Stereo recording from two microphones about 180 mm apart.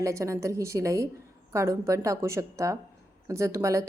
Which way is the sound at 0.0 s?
15° right (ahead or behind).